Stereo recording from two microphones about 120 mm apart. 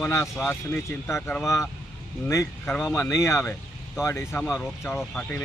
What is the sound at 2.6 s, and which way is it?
Speech, 5° left (ahead or behind).